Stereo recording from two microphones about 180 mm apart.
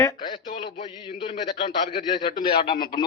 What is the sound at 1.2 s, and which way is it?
Speech, 30° left (ahead or behind).